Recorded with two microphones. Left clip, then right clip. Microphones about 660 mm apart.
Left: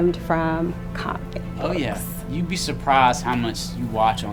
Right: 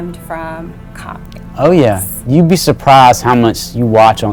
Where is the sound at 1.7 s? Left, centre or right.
Right.